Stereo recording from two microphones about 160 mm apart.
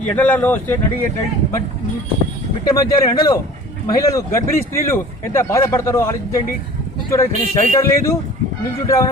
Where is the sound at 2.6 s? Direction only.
25° left (ahead or behind).